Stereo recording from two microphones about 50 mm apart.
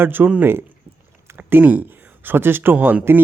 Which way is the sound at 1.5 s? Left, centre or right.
Right.